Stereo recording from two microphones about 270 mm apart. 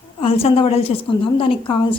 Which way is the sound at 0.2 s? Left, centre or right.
Left.